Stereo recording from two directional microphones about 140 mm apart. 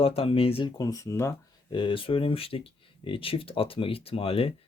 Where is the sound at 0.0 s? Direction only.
40° left (ahead or behind).